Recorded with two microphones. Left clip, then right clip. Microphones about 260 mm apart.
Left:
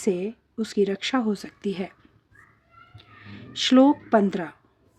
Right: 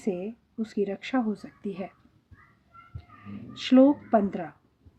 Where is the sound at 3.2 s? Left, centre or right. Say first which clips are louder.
Left 6 dB; left.